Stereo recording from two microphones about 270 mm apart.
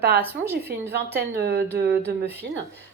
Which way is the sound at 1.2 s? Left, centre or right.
Right.